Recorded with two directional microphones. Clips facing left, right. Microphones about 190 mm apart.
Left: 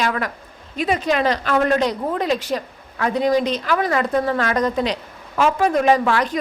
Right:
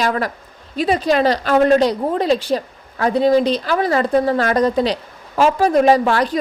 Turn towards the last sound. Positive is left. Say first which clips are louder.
# right 3 dB
turn(degrees=-35)  # may be behind; listen again after turning